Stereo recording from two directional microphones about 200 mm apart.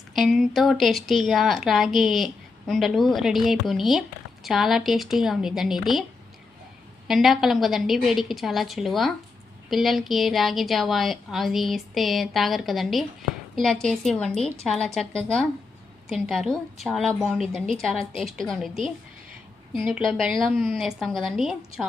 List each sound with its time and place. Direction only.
0.1 s speech: centre (ahead or behind)
7.1 s speech: centre (ahead or behind)